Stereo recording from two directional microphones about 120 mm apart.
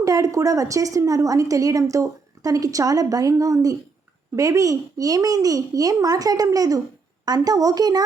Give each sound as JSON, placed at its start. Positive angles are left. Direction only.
{"t": 0.0, "sound": "a woman's voice", "side_deg": -30}